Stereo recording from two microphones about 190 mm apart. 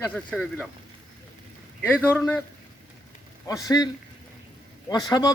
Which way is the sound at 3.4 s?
20° left (ahead or behind).